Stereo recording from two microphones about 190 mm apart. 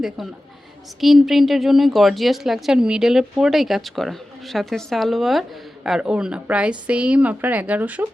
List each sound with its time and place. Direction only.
1.0 s speech: centre (ahead or behind)